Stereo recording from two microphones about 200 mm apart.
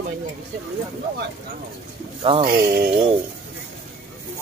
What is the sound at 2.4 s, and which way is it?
Speech, 50° right (ahead or behind).